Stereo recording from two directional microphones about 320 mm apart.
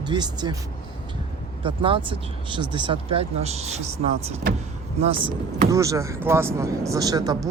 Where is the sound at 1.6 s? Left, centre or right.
Centre.